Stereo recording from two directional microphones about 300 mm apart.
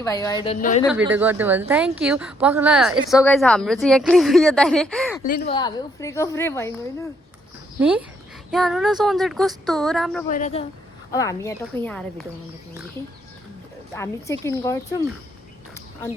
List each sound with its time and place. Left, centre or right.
0.0 s a woman's voice: centre
0.9 s a woman's voice: centre
5.2 s a woman's voice: left
5.5 s a woman's voice: centre
7.8 s a woman's voice: centre
10.2 s a woman's voice: left
11.1 s a woman's voice: centre
13.9 s a woman's voice: centre